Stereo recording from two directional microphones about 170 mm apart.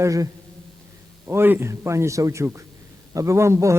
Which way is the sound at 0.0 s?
20° right (ahead or behind).